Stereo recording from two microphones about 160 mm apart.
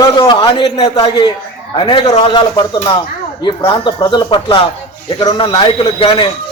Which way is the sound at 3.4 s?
30° left (ahead or behind).